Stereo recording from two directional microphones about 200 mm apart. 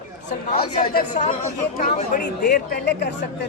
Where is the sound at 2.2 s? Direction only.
50° left (ahead or behind).